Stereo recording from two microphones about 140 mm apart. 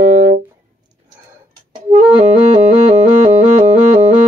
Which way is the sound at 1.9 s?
55° right (ahead or behind).